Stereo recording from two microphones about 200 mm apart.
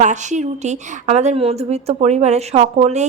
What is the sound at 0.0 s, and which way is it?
A woman's voice, 35° right (ahead or behind).